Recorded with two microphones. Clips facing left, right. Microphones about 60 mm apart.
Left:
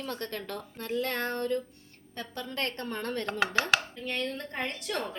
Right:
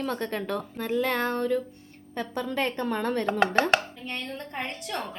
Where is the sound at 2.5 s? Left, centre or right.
Centre.